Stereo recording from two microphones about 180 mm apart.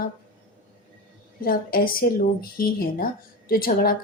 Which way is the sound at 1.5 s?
55° left (ahead or behind).